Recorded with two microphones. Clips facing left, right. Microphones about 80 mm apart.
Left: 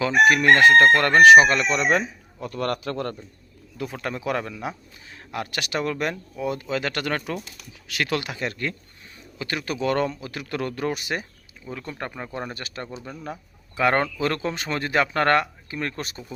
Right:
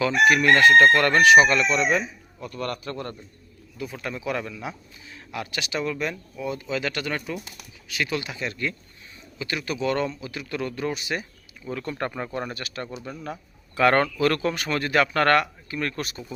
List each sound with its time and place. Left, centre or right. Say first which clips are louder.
0.0 s speech: left 1 dB; left
1.9 s a man's voice: left 2 dB; left
3.9 s speech: left 2 dB; left
7.9 s speech: left 2 dB; left
11.6 s speech: right 4 dB; centre
12.3 s speech: right 1 dB; left
12.5 s speech: right 1 dB; left
13.3 s speech: right 2 dB; centre; by 16.2 s left